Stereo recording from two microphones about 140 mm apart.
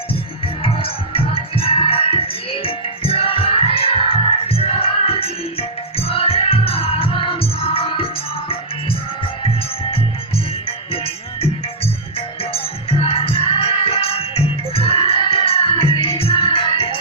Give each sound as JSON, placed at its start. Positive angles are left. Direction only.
{"t": 0.4, "sound": "music", "side_deg": 40}
{"t": 10.9, "sound": "music", "side_deg": 45}